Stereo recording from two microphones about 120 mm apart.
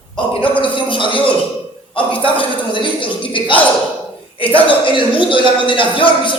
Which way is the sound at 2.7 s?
45° left (ahead or behind).